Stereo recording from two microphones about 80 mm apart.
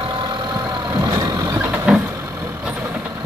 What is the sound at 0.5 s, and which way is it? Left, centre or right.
Vehicle, right.